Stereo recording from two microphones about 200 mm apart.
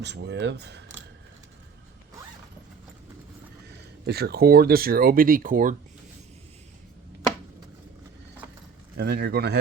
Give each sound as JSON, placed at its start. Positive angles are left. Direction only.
{"t": 0.0, "sound": "speech", "side_deg": -60}
{"t": 4.0, "sound": "speech", "side_deg": -50}
{"t": 9.0, "sound": "speech", "side_deg": -55}